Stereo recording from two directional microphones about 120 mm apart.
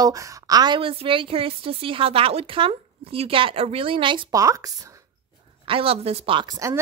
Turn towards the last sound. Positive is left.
turn(degrees=-40)  # may be behind; listen again after turning